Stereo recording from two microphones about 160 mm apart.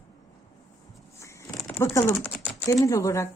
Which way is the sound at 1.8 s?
20° left (ahead or behind).